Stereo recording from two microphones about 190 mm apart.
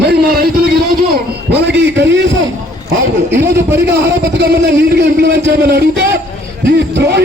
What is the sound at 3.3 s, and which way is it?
Speech, 15° right (ahead or behind).